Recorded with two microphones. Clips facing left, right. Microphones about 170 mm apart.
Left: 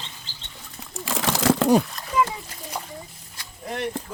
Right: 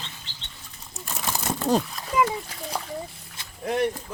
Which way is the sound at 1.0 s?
90° left.